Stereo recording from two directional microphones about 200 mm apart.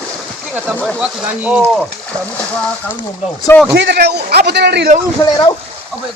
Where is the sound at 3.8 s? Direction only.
55° right (ahead or behind).